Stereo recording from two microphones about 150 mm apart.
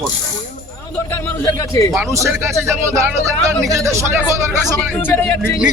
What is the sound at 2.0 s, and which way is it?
Speech, 20° right (ahead or behind).